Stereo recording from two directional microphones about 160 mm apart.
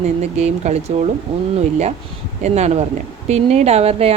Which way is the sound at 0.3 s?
45° right (ahead or behind).